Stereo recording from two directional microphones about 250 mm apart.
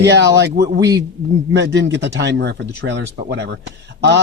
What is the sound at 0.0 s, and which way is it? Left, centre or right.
Speech, right.